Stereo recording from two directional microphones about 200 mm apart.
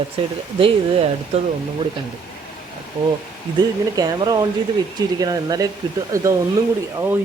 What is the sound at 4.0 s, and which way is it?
Speech, 20° right (ahead or behind).